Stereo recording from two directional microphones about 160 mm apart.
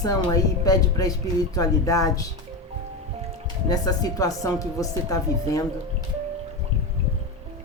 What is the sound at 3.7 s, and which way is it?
Speech, 25° left (ahead or behind).